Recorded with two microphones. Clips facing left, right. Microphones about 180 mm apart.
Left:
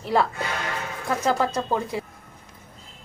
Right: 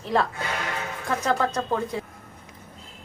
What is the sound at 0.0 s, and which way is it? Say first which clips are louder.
Speech: left 2 dB; 5° left (ahead or behind).